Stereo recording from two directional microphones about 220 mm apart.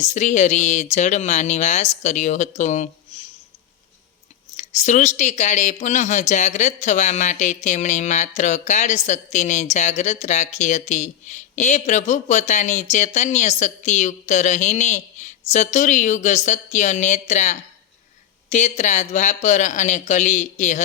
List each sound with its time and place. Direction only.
0.0 s a woman's voice: 35° left (ahead or behind)
4.5 s a woman's voice: 30° left (ahead or behind)